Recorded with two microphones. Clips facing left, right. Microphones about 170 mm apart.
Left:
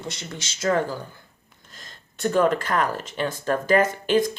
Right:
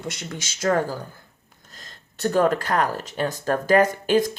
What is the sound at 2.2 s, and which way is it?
A woman's voice, 40° right (ahead or behind).